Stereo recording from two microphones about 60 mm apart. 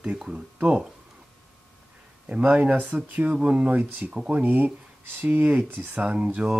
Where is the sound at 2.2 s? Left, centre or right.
Right.